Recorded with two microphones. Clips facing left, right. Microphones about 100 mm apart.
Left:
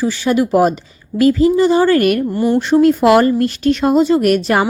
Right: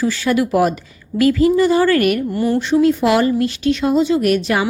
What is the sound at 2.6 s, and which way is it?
A woman's voice, 50° left (ahead or behind).